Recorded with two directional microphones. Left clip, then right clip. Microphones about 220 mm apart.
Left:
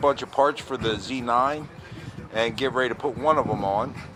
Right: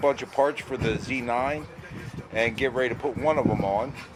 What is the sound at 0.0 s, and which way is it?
Speech, 20° right (ahead or behind).